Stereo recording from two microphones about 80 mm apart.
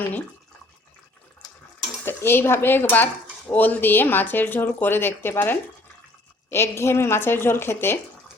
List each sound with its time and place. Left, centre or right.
2.0 s a woman's voice: left